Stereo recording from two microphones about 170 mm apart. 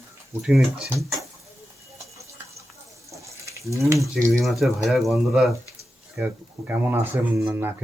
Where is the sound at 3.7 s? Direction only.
15° right (ahead or behind).